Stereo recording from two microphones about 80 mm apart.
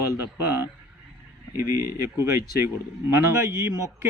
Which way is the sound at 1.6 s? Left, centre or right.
Right.